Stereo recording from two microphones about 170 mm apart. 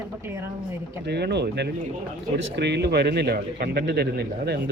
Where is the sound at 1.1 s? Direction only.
80° right.